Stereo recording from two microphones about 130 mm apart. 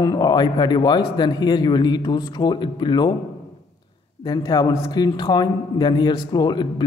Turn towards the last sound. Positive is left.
turn(degrees=35)  # may be behind; listen again after turning